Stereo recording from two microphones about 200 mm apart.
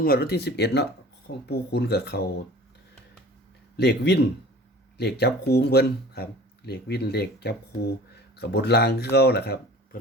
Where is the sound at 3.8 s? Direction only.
55° left (ahead or behind).